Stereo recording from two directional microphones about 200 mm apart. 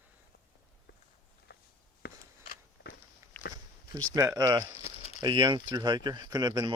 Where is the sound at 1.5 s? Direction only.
55° left (ahead or behind).